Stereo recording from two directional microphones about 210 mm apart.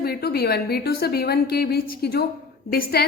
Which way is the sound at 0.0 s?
50° left (ahead or behind).